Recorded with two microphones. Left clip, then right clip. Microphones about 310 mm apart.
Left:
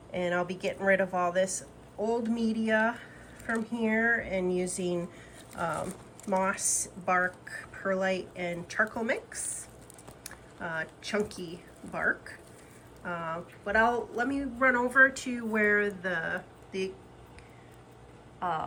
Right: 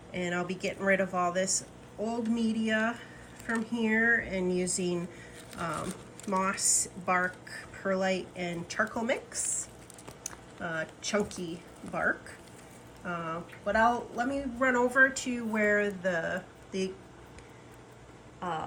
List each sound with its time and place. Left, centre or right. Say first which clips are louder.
0.1 s speech: left 3 dB; centre
18.3 s speech: left 3 dB; centre